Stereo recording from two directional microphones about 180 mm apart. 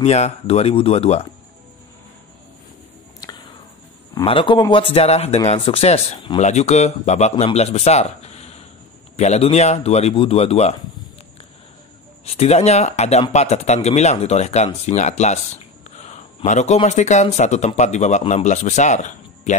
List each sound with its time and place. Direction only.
0.0 s speech: 35° left (ahead or behind)
4.2 s speech: 30° left (ahead or behind)
12.3 s speech: 35° left (ahead or behind)